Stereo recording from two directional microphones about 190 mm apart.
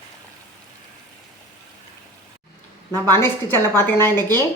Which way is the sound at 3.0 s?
10° left (ahead or behind).